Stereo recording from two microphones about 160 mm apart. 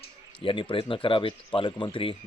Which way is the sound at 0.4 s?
30° left (ahead or behind).